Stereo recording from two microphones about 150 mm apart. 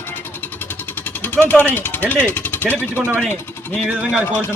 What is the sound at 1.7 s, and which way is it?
Speech, 15° left (ahead or behind).